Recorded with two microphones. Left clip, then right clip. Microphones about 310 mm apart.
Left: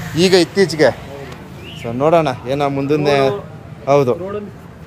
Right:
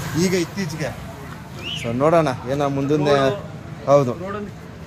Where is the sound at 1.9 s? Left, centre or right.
Centre.